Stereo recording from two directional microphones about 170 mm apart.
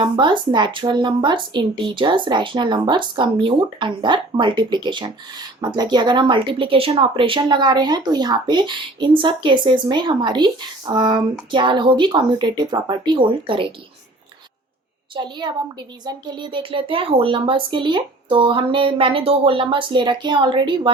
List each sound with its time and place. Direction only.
0.0 s speech: 25° right (ahead or behind)
15.1 s speech: 25° right (ahead or behind)